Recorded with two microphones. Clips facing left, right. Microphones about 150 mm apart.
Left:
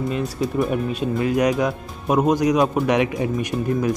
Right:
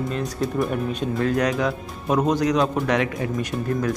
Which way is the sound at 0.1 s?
5° left (ahead or behind).